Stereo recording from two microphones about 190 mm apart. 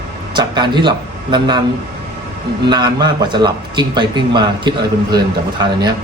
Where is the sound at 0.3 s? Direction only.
25° right (ahead or behind).